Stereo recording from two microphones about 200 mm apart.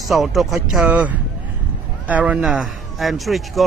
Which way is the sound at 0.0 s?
Centre (ahead or behind).